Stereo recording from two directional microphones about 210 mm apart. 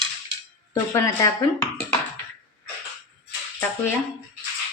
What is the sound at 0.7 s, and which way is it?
Speech, 15° left (ahead or behind).